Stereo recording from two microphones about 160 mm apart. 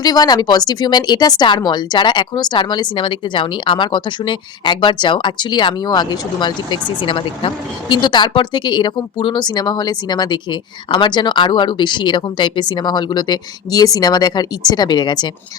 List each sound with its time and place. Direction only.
0.0 s speech: 25° left (ahead or behind)